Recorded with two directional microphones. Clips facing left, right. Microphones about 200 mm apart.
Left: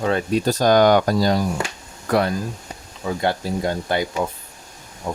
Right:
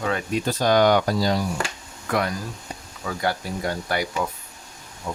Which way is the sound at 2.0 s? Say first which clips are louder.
Left 5 dB; 35° left (ahead or behind).